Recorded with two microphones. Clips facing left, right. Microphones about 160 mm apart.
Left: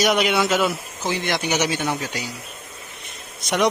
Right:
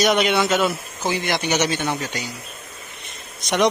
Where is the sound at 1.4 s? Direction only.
10° left (ahead or behind).